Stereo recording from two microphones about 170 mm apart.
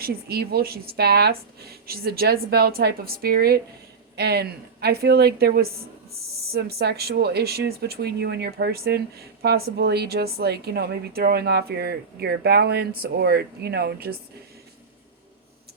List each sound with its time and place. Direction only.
0.0 s a woman's voice: 65° right (ahead or behind)